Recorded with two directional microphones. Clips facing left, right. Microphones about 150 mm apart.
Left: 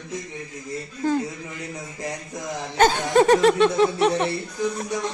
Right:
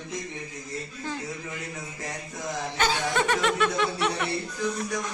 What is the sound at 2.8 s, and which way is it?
Laughter, 45° left (ahead or behind).